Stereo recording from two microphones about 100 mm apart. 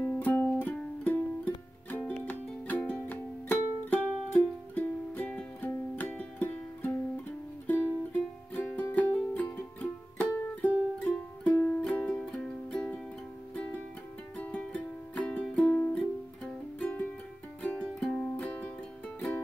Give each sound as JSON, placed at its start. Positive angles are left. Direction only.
{"t": 0.0, "sound": "music", "side_deg": 15}
{"t": 14.4, "sound": "music", "side_deg": 10}